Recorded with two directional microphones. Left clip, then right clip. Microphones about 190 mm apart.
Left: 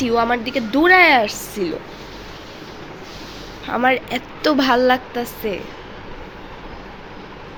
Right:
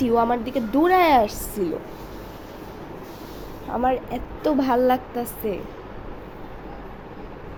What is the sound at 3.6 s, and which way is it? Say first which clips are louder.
Speech: left 5 dB; 30° left (ahead or behind).